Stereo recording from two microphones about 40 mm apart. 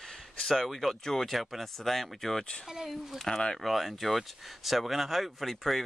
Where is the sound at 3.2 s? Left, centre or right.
Centre.